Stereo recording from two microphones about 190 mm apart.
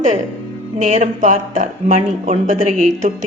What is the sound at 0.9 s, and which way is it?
A woman's voice, 35° right (ahead or behind).